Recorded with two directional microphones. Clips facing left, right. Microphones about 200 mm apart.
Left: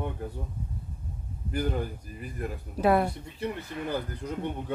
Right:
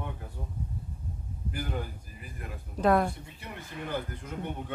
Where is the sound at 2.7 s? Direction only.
5° left (ahead or behind).